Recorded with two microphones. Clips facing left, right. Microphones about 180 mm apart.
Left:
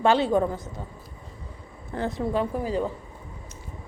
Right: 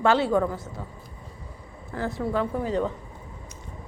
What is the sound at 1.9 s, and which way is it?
A woman's voice, 20° left (ahead or behind).